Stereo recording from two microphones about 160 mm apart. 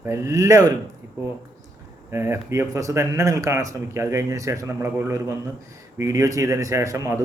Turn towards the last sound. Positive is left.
turn(degrees=-20)  # may be behind; listen again after turning